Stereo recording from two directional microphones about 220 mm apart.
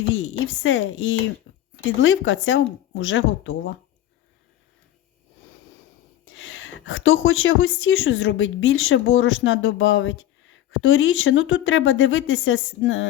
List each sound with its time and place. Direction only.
0.0 s a woman's voice: 60° left (ahead or behind)
1.5 s a sound: 70° left (ahead or behind)
2.0 s speech: 60° left (ahead or behind)
6.2 s speech: 60° left (ahead or behind)